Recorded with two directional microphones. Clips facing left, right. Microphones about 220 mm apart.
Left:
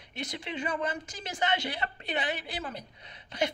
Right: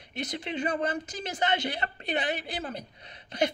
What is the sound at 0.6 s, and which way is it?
Speech, 40° right (ahead or behind).